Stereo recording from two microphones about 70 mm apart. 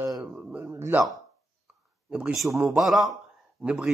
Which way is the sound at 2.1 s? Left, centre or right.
Centre.